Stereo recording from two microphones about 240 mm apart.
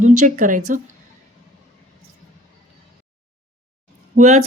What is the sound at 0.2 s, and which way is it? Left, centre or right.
Speech, right.